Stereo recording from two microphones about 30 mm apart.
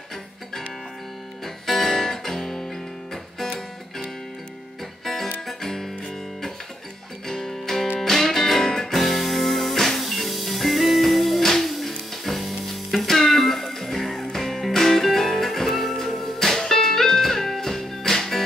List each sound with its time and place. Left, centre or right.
1.4 s music: centre
5.0 s music: centre
7.2 s music: centre
8.9 s music: centre